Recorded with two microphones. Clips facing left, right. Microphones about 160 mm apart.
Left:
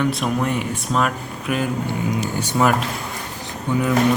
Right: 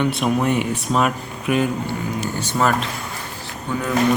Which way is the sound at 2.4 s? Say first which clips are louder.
Left 1 dB; 10° left (ahead or behind).